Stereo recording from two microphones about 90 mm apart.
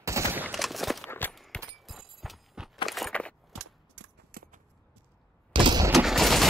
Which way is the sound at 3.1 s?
15° left (ahead or behind).